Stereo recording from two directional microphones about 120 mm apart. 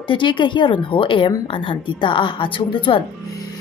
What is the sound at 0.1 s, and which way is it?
A woman's voice, 40° left (ahead or behind).